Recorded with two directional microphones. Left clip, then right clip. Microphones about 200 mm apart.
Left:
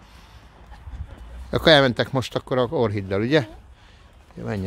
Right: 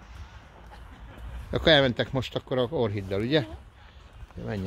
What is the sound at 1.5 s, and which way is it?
Speech, 30° left (ahead or behind).